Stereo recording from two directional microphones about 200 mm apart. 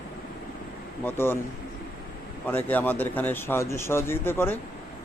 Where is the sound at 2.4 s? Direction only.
10° left (ahead or behind).